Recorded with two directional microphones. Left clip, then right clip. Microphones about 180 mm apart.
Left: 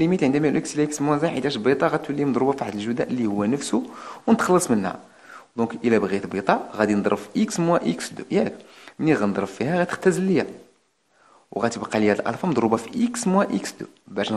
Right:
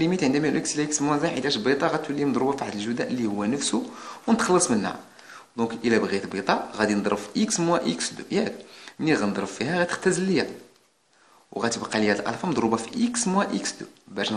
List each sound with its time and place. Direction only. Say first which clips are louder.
0.0 s speech: left 3 dB; 40° left (ahead or behind)
11.5 s speech: left 2 dB; 40° left (ahead or behind)